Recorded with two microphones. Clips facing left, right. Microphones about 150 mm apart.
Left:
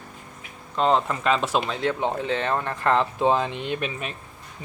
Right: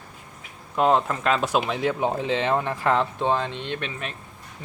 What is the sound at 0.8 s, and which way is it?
Speech, 5° right (ahead or behind).